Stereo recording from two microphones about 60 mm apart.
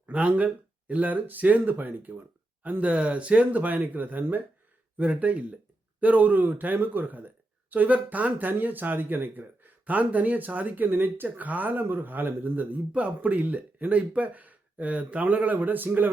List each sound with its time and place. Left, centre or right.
0.1 s speech: right